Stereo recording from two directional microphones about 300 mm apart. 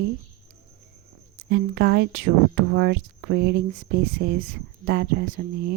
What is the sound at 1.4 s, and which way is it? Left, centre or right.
Speech, right.